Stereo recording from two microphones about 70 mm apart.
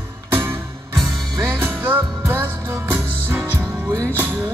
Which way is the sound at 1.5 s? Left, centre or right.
Right.